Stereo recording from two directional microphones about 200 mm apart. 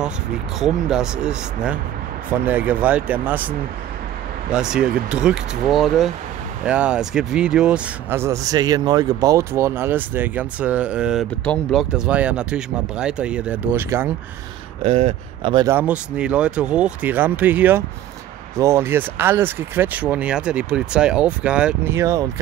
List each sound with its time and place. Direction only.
0.6 s speech: 5° right (ahead or behind)
14.8 s speech: 30° right (ahead or behind)
15.7 s speech: 5° right (ahead or behind)